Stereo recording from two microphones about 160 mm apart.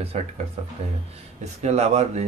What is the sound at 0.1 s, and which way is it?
Speech, 40° right (ahead or behind).